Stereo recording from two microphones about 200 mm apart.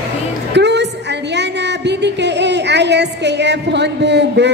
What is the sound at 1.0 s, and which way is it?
A woman's voice, 60° right (ahead or behind).